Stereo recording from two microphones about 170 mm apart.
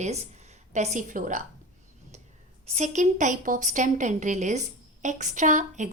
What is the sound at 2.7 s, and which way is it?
Speech, 45° right (ahead or behind).